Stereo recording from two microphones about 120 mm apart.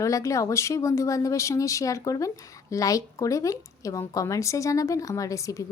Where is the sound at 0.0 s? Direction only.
25° left (ahead or behind).